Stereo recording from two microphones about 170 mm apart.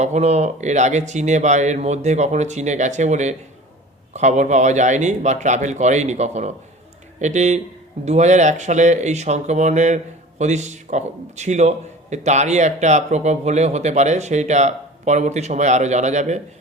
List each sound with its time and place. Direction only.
0.0 s speech: 40° right (ahead or behind)